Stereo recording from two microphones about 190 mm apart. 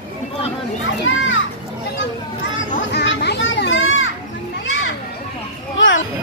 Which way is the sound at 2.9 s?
60° left (ahead or behind).